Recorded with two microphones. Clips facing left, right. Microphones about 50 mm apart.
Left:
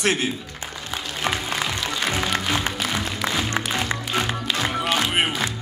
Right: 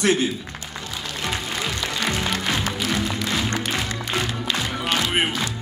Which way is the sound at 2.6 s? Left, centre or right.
Left.